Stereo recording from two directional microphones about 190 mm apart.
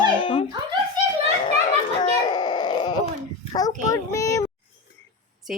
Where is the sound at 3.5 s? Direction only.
20° left (ahead or behind).